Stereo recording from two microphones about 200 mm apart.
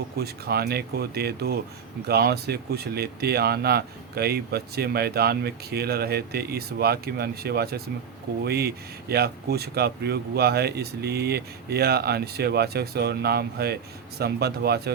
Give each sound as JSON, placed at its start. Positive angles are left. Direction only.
{"t": 0.2, "sound": "speech", "side_deg": -50}